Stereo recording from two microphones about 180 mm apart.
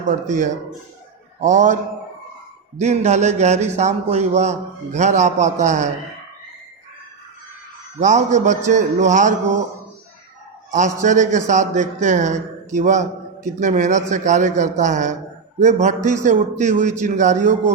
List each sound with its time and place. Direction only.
0.3 s a man's voice: 45° right (ahead or behind)
8.0 s a man's voice: 40° right (ahead or behind)
10.7 s a man's voice: 45° right (ahead or behind)